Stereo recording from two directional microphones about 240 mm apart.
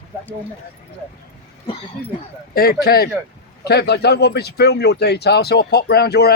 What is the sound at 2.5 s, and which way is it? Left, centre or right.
Speech, left.